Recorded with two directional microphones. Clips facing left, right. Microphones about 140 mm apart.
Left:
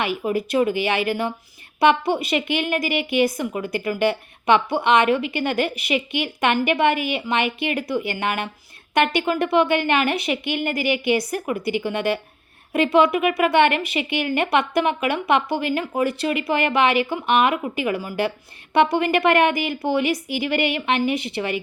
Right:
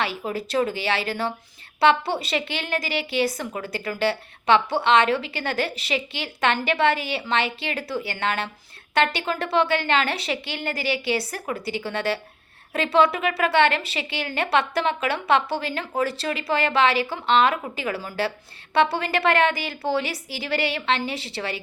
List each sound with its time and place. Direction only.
0.0 s a woman's voice: 15° left (ahead or behind)